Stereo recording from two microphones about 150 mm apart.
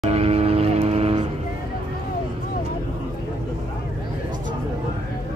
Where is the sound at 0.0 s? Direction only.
45° right (ahead or behind).